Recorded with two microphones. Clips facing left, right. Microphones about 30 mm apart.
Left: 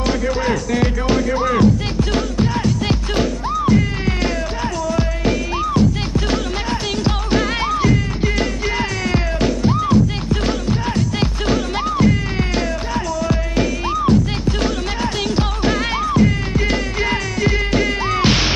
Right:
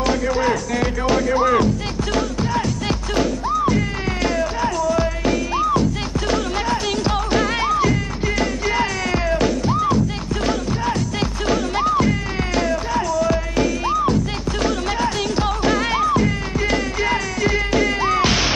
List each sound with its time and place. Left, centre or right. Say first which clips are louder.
0.0 s music: even; centre
1.6 s music: left 4 dB; centre